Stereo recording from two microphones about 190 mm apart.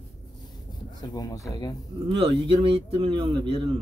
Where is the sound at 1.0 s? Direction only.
20° left (ahead or behind).